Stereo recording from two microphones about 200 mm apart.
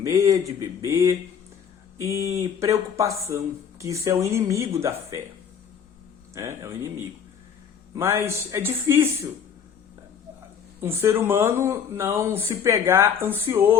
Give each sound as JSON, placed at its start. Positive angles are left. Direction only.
{"t": 0.0, "sound": "speech", "side_deg": -15}
{"t": 6.3, "sound": "speech", "side_deg": -15}
{"t": 7.9, "sound": "speech", "side_deg": -15}
{"t": 10.8, "sound": "speech", "side_deg": -15}